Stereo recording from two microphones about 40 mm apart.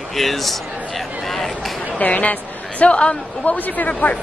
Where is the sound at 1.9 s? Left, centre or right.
Left.